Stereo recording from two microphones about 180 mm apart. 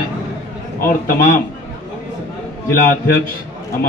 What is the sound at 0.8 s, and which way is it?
Speech, 55° left (ahead or behind).